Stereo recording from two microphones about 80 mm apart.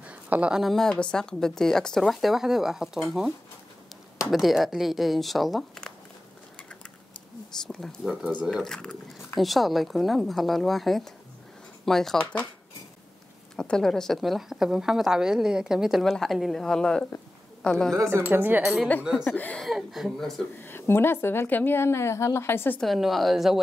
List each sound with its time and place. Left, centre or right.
0.0 s a sound: centre
0.6 s a woman's voice: centre
0.8 s a woman's voice: centre
7.6 s a woman's voice: centre
8.2 s speech: centre
8.5 s a woman's voice: centre
13.6 s a woman's voice: centre
17.9 s speech: right
18.2 s speech: right
19.2 s a woman's voice: left
19.6 s a woman's voice: centre
20.6 s a woman's voice: left
22.8 s a woman's voice: centre